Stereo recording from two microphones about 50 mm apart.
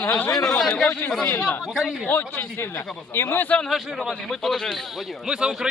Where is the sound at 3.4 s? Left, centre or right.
Left.